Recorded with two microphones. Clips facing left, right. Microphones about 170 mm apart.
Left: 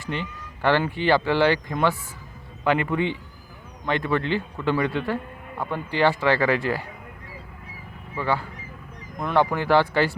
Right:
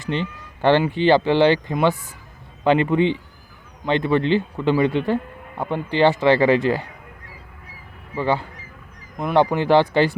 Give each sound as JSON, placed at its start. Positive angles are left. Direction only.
{"t": 0.0, "sound": "a man's voice", "side_deg": -25}
{"t": 8.1, "sound": "a man's voice", "side_deg": -20}
{"t": 9.1, "sound": "a man's voice", "side_deg": -10}